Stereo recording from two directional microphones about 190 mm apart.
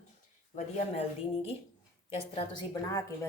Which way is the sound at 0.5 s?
30° left (ahead or behind).